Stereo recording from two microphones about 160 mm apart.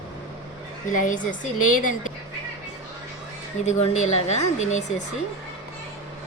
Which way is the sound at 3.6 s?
45° left (ahead or behind).